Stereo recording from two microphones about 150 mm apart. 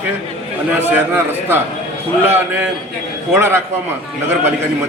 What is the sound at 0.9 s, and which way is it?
A man's voice, 15° right (ahead or behind).